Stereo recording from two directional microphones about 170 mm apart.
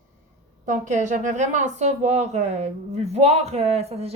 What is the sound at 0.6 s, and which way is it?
A woman's voice, 45° right (ahead or behind).